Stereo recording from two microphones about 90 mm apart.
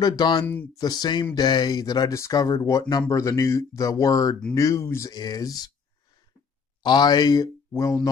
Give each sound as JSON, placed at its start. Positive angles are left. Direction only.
{"t": 0.0, "sound": "speech", "side_deg": 50}
{"t": 5.1, "sound": "speech", "side_deg": 45}
{"t": 6.8, "sound": "speech", "side_deg": 55}
{"t": 7.7, "sound": "speech", "side_deg": 35}